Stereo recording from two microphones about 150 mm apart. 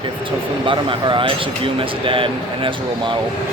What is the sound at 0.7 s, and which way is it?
A man's voice, 35° right (ahead or behind).